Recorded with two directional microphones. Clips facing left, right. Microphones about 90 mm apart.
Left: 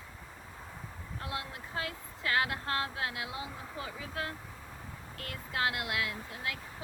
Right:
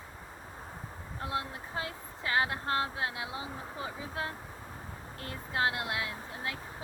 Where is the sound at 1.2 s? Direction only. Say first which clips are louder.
Right 4 dB; 30° right (ahead or behind).